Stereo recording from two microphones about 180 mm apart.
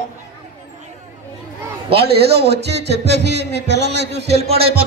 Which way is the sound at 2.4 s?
70° right (ahead or behind).